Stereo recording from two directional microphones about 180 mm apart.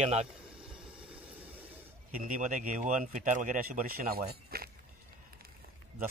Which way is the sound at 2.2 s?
45° right (ahead or behind).